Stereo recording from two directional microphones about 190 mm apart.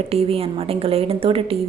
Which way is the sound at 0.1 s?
30° right (ahead or behind).